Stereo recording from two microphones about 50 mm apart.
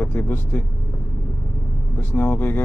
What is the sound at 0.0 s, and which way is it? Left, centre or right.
Speech, left.